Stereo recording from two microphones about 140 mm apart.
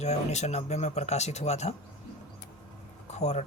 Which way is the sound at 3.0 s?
55° left (ahead or behind).